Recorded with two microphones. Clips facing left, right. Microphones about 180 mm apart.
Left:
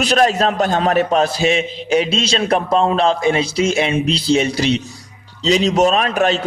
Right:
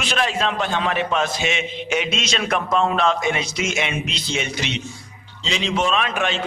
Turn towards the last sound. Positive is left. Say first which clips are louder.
# left 6 dB
turn(degrees=40)  # may be behind; listen again after turning